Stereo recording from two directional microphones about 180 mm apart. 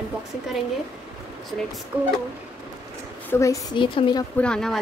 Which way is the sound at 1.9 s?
5° right (ahead or behind).